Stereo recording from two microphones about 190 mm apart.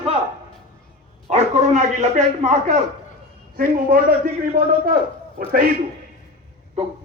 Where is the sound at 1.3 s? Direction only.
35° right (ahead or behind).